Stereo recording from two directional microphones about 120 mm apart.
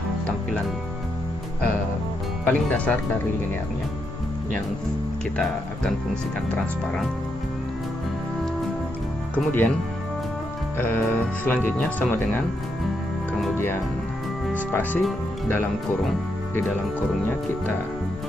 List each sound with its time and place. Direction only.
2.4 s speech: 15° left (ahead or behind)
9.3 s speech: 15° left (ahead or behind)
10.8 s speech: 15° left (ahead or behind)
14.5 s speech: 15° left (ahead or behind)